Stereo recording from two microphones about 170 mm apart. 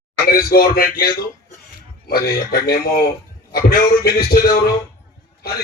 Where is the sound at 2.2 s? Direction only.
65° left (ahead or behind).